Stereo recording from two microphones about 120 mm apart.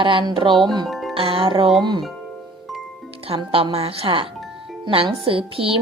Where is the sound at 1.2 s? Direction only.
50° right (ahead or behind).